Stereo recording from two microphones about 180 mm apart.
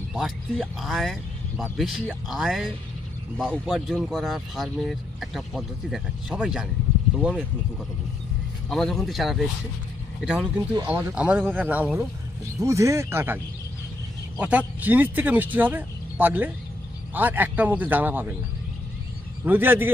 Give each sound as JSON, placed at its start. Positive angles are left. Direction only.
{"t": 0.1, "sound": "speech", "side_deg": 0}
{"t": 8.6, "sound": "speech", "side_deg": 0}
{"t": 14.4, "sound": "speech", "side_deg": -10}
{"t": 19.4, "sound": "speech", "side_deg": -10}